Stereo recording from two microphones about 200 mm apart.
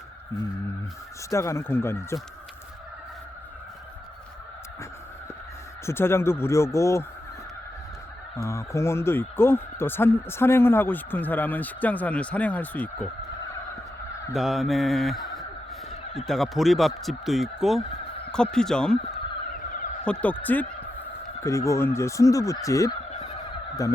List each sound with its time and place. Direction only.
1.3 s speech: 15° left (ahead or behind)
5.8 s speech: 10° left (ahead or behind)
8.4 s speech: 15° left (ahead or behind)
14.3 s speech: centre (ahead or behind)
20.2 s speech: 10° left (ahead or behind)